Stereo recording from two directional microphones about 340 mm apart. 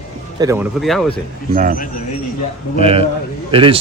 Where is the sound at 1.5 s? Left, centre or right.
Right.